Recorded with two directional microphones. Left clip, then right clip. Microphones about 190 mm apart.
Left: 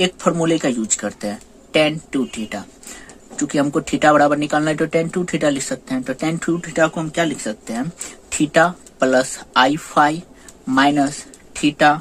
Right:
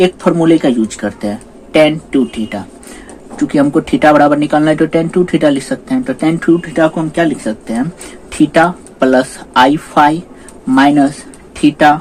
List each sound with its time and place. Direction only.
0.0 s speech: 30° left (ahead or behind)